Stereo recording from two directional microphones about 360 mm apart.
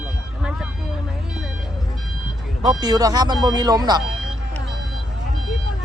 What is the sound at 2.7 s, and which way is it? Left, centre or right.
Speech, centre.